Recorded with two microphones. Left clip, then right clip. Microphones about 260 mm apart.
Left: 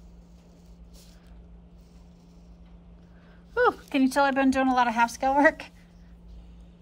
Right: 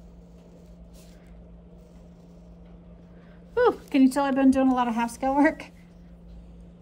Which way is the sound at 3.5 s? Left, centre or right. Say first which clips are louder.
Right 2 dB; centre.